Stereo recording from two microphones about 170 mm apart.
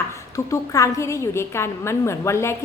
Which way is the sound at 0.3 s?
20° left (ahead or behind).